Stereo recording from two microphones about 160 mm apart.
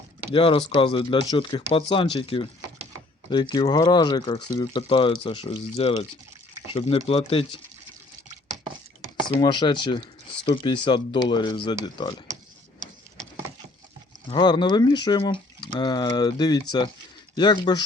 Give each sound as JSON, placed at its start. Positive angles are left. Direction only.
{"t": 0.3, "sound": "speech", "side_deg": 35}
{"t": 9.4, "sound": "speech", "side_deg": 30}
{"t": 14.3, "sound": "speech", "side_deg": 30}